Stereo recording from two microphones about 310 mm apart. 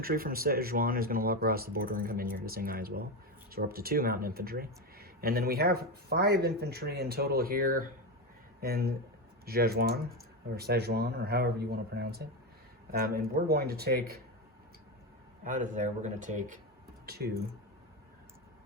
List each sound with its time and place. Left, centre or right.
0.0 s speech: right
15.4 s speech: right